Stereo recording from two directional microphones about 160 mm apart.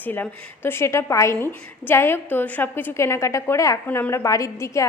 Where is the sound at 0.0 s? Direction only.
10° left (ahead or behind).